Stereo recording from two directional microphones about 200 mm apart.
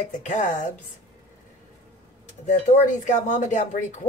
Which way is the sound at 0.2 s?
40° left (ahead or behind).